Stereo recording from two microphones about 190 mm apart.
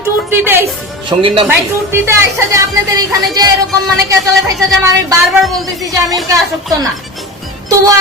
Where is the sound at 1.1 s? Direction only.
25° right (ahead or behind).